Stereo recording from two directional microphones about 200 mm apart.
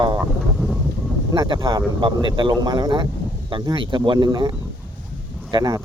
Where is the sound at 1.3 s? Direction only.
20° right (ahead or behind).